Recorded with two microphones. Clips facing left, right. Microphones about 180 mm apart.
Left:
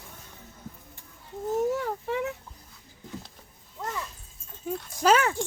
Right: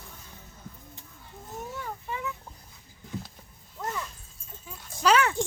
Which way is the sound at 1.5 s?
80° left.